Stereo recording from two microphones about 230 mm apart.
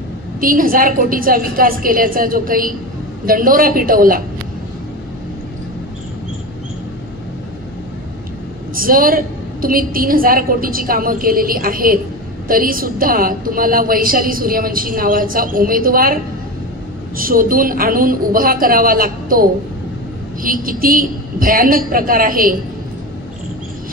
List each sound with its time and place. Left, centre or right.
0.4 s a woman's voice: right
8.7 s a woman's voice: right
17.2 s a woman's voice: right